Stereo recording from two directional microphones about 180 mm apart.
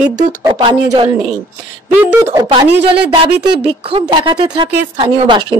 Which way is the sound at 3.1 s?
25° right (ahead or behind).